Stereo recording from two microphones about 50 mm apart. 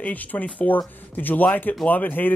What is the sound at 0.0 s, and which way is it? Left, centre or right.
Speech, left.